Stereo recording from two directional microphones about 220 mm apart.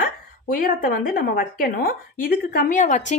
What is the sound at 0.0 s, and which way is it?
A woman's voice, 40° left (ahead or behind).